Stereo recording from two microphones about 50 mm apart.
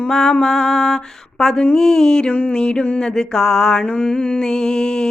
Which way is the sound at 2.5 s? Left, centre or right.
Centre.